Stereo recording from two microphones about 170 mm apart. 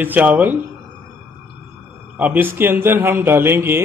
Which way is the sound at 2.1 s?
10° right (ahead or behind).